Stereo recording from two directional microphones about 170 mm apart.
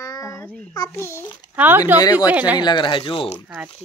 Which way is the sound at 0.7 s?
20° left (ahead or behind).